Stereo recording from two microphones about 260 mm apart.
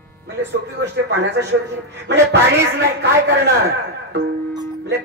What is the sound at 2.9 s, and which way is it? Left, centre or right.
Speech, right.